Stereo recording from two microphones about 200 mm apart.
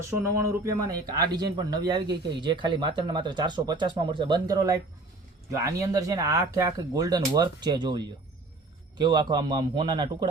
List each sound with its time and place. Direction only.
0.1 s speech: 15° right (ahead or behind)